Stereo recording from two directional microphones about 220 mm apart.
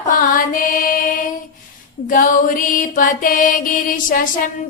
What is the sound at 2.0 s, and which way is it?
Music, 40° left (ahead or behind).